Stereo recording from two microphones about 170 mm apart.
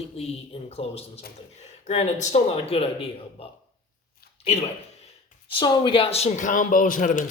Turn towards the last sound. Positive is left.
turn(degrees=50)  # may be behind; listen again after turning